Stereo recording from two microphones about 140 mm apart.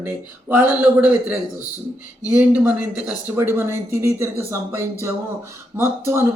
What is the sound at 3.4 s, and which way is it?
Speech, 20° right (ahead or behind).